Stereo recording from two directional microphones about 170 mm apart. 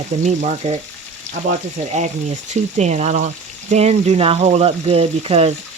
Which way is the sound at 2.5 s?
45° right (ahead or behind).